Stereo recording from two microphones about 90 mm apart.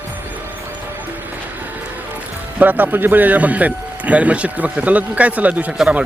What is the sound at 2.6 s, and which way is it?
Speech, 20° right (ahead or behind).